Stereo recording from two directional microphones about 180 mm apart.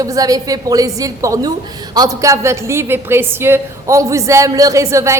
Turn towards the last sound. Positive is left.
turn(degrees=-15)  # may be behind; listen again after turning